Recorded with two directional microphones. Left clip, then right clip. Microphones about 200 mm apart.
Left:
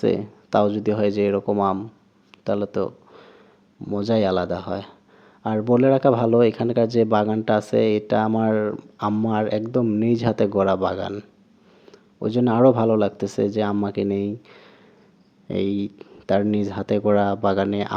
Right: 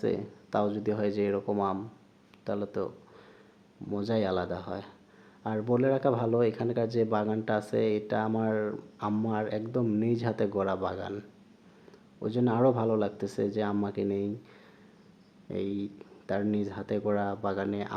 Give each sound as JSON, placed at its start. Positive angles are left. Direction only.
{"t": 0.0, "sound": "speech", "side_deg": 35}
{"t": 2.4, "sound": "a sound", "side_deg": 30}
{"t": 3.8, "sound": "speech", "side_deg": 30}